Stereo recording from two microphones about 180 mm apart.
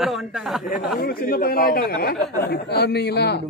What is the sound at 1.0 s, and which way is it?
Speech, 55° left (ahead or behind).